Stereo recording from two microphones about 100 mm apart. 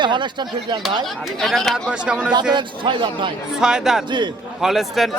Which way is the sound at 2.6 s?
55° right (ahead or behind).